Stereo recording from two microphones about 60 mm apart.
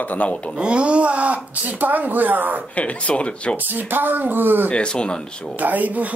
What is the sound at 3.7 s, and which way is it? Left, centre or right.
Speech, right.